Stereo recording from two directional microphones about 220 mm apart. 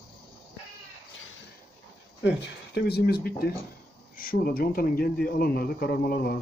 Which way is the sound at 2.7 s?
45° left (ahead or behind).